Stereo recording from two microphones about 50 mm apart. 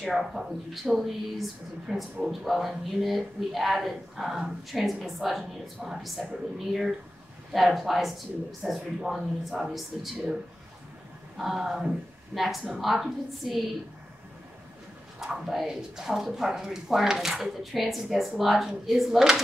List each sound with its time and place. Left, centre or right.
0.0 s speech: centre
5.8 s speech: centre
6.2 s speech: centre
11.3 s speech: centre
15.1 s speech: centre